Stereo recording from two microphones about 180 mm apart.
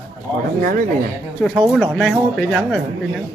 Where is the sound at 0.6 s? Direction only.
50° right (ahead or behind).